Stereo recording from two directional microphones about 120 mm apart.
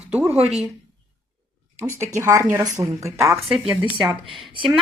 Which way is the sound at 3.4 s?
5° right (ahead or behind).